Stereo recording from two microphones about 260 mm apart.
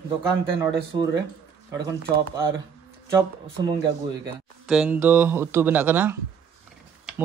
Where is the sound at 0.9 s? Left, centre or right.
Centre.